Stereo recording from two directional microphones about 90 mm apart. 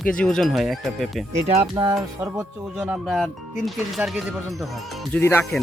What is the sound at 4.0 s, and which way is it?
Speech, 20° right (ahead or behind).